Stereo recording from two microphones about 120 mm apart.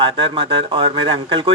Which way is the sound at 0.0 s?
45° right (ahead or behind).